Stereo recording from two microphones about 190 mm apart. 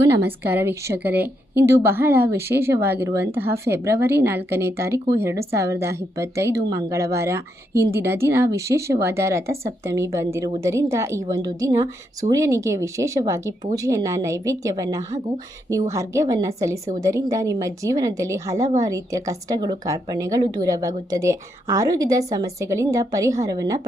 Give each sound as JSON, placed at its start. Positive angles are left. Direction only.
{"t": 0.2, "sound": "a woman's voice", "side_deg": -10}